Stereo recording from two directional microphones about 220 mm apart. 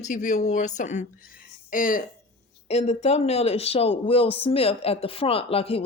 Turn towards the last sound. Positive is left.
turn(degrees=25)  # may be behind; listen again after turning